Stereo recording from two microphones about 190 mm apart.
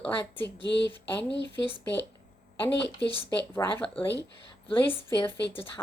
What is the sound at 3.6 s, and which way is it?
Speech, 15° left (ahead or behind).